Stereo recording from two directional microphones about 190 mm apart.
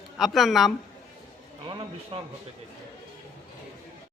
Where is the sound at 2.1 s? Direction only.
25° right (ahead or behind).